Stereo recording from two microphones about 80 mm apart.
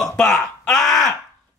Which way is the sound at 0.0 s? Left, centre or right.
Centre.